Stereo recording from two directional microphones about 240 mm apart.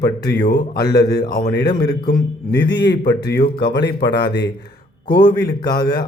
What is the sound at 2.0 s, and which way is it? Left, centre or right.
A man's voice, left.